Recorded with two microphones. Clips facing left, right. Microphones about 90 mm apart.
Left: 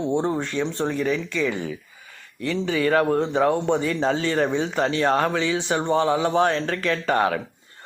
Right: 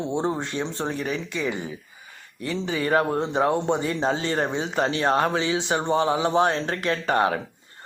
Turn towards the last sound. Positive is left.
turn(degrees=-30)  # may be behind; listen again after turning